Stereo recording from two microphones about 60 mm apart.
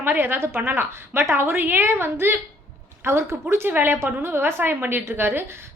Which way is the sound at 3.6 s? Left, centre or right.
Right.